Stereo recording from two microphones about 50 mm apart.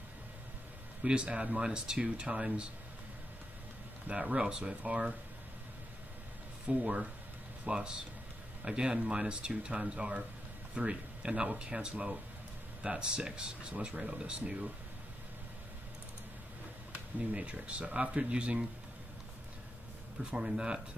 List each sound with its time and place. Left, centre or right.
1.0 s speech: centre
4.1 s speech: right
6.7 s speech: right
16.9 s speech: right
20.2 s speech: right